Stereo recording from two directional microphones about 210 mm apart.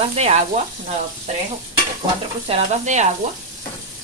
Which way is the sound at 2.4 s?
30° right (ahead or behind).